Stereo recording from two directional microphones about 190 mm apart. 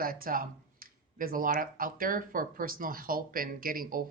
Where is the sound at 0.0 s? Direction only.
50° right (ahead or behind).